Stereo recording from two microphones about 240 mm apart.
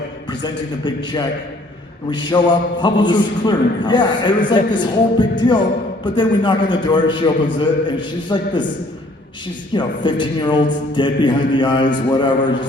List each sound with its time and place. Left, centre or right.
0.4 s a man's voice: centre
9.7 s a man's voice: centre